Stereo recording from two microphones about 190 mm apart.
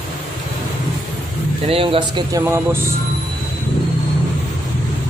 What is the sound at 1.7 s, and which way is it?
Speech, 30° right (ahead or behind).